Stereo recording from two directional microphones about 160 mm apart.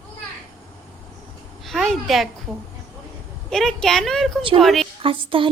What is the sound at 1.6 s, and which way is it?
Speech, centre (ahead or behind).